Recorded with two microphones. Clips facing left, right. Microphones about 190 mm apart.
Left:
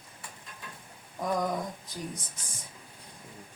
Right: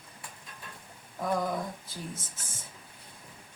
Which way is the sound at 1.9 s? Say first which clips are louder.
Left 2 dB; 15° left (ahead or behind).